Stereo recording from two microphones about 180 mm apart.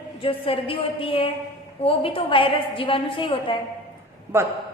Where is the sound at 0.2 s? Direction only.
30° left (ahead or behind).